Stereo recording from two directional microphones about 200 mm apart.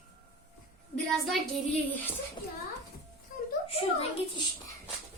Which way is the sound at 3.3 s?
45° left (ahead or behind).